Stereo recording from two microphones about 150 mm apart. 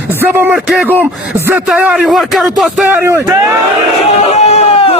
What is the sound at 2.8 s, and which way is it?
Speech, 15° right (ahead or behind).